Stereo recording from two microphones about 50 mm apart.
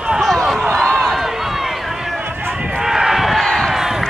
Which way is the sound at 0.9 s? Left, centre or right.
Centre.